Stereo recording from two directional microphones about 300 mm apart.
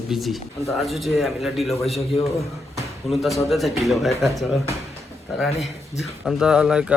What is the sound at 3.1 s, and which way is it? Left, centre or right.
Speech, centre.